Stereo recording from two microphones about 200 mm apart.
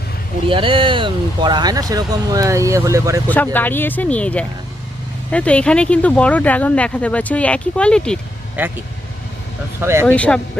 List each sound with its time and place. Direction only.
0.4 s speech: 25° right (ahead or behind)
3.2 s speech: 10° left (ahead or behind)
8.6 s speech: 10° right (ahead or behind)
9.8 s speech: 15° right (ahead or behind)
10.1 s speech: 5° left (ahead or behind)